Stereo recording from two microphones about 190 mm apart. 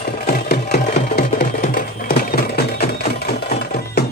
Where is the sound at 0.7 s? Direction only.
40° left (ahead or behind).